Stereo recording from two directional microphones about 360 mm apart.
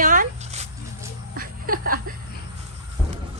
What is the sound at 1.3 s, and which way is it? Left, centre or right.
Chuckle, right.